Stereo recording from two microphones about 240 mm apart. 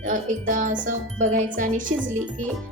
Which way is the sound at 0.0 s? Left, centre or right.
Right.